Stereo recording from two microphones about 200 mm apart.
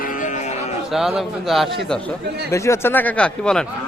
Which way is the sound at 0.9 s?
Centre (ahead or behind).